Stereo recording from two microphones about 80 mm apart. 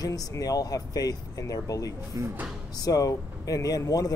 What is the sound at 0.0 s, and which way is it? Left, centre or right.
Speech, left.